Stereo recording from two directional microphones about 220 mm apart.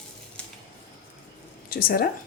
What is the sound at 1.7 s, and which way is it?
Speech, 45° left (ahead or behind).